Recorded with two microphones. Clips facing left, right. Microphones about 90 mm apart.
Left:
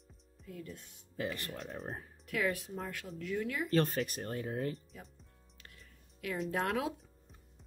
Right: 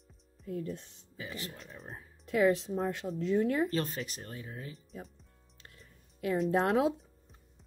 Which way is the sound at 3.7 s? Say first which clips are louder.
Left 3 dB; 50° left (ahead or behind).